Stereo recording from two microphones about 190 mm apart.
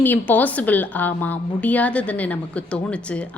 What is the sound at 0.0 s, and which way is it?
A woman's voice, 10° left (ahead or behind).